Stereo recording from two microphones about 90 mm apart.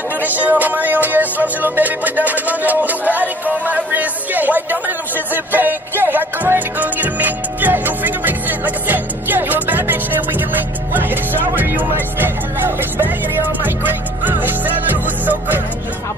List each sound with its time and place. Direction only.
0.2 s music: 20° right (ahead or behind)
10.9 s speech: 20° right (ahead or behind)